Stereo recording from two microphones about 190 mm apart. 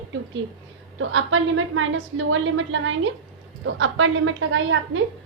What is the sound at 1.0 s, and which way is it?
A woman's voice, 90° right.